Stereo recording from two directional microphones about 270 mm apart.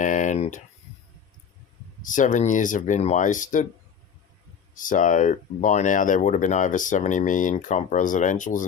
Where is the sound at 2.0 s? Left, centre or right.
Left.